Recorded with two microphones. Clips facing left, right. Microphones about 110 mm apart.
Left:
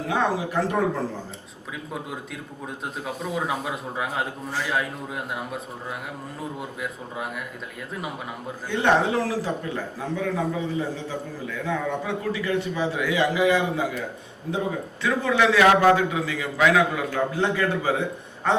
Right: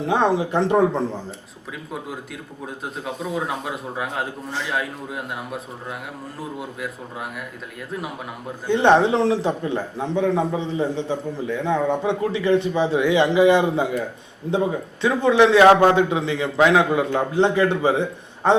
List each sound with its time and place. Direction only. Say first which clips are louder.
0.1 s a man's voice: right 5 dB; 25° right (ahead or behind)
2.8 s a man's voice: right 2 dB; centre (ahead or behind)
8.6 s a man's voice: right 5 dB; 25° right (ahead or behind)
15.0 s a man's voice: right 5 dB; 25° right (ahead or behind)